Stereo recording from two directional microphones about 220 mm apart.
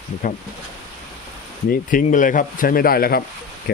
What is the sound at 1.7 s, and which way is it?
Speech, 35° left (ahead or behind).